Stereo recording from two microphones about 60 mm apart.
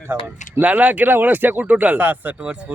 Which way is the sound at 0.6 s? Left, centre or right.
Right.